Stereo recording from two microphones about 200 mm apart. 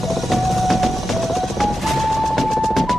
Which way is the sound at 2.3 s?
Centre (ahead or behind).